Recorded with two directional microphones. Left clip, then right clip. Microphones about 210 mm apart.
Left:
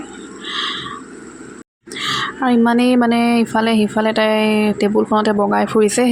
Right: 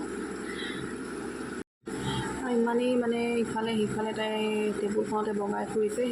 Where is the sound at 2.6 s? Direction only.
45° left (ahead or behind).